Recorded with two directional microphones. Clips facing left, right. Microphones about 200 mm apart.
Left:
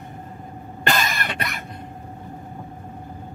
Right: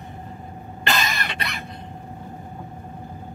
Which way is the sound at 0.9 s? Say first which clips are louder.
Left 1 dB; 50° left (ahead or behind).